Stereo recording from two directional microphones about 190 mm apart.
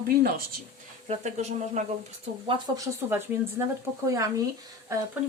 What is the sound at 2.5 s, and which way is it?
Speech, 15° right (ahead or behind).